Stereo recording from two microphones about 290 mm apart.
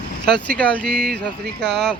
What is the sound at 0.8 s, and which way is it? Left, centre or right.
Speech, right.